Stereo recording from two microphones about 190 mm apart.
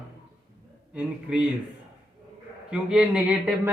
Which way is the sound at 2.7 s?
5° right (ahead or behind).